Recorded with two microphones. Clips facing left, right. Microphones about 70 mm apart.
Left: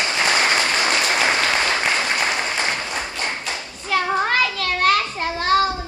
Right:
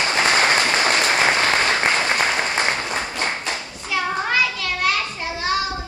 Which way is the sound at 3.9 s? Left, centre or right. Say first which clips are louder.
Left 2 dB; left.